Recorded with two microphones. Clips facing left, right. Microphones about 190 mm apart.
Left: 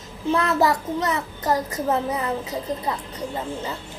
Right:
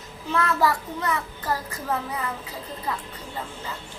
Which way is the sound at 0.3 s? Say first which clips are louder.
Left 3 dB; 25° left (ahead or behind).